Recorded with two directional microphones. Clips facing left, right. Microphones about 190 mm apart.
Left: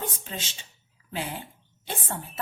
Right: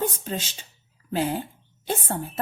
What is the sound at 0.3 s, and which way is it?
A woman's voice, 40° right (ahead or behind).